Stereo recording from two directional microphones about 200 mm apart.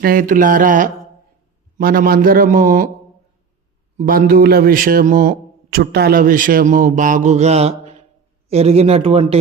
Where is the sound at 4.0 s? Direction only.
45° right (ahead or behind); by 9.3 s 30° right (ahead or behind).